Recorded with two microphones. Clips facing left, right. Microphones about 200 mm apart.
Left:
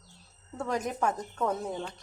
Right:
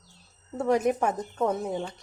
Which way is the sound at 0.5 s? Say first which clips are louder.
Right 8 dB; 25° right (ahead or behind).